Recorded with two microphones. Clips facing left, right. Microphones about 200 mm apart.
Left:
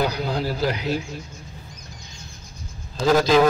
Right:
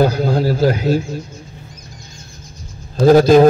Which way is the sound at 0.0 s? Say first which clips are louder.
Right 9 dB; 50° right (ahead or behind).